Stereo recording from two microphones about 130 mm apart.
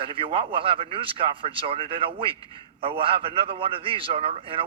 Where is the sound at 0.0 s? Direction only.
40° right (ahead or behind).